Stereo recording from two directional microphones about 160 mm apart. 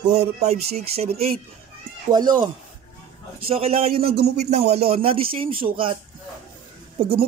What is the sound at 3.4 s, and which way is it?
Speech, 40° right (ahead or behind).